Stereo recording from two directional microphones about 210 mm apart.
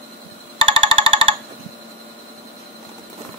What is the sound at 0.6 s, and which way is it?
Music, 25° right (ahead or behind).